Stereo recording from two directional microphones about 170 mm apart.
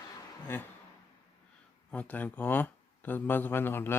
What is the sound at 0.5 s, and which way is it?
Speech, 15° left (ahead or behind).